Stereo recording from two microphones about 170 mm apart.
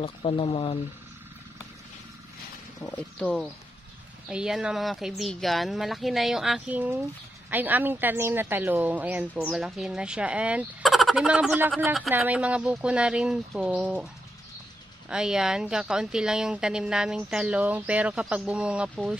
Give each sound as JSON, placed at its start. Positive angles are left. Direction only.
{"t": 0.0, "sound": "speech", "side_deg": 35}
{"t": 2.9, "sound": "speech", "side_deg": 5}
{"t": 15.0, "sound": "speech", "side_deg": -5}